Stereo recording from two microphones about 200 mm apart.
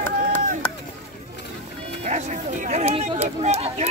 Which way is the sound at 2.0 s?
35° right (ahead or behind).